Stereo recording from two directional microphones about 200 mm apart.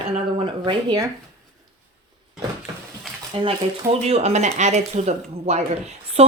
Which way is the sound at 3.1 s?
Centre (ahead or behind).